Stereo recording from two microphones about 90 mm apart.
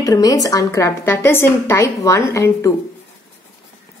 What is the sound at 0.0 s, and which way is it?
A woman's voice, 45° left (ahead or behind).